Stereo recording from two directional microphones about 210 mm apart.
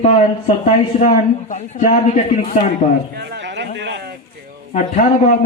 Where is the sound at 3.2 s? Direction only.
55° right (ahead or behind).